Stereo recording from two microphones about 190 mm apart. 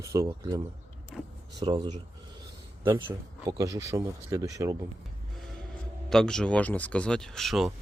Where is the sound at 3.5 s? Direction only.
20° right (ahead or behind).